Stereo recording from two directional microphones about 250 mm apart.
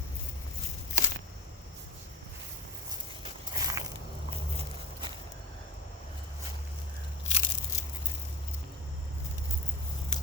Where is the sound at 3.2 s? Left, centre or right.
Centre.